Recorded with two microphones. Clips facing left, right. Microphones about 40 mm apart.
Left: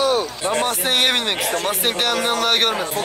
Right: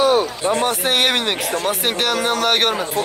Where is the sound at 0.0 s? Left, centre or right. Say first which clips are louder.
Right 3 dB; centre.